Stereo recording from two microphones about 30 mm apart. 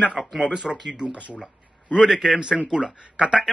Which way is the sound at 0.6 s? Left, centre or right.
Centre.